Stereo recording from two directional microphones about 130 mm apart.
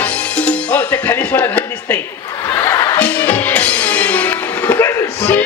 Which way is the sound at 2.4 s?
20° left (ahead or behind).